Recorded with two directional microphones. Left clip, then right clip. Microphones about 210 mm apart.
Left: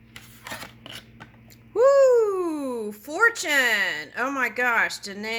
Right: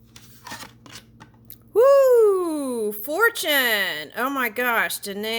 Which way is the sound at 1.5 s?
45° right (ahead or behind).